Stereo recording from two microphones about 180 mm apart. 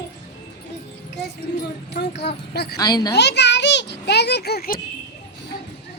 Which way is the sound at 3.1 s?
70° left (ahead or behind).